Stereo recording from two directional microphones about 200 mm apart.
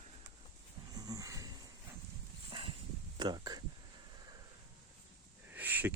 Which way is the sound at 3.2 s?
20° right (ahead or behind).